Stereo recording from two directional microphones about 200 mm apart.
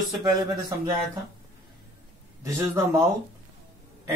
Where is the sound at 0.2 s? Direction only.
20° right (ahead or behind).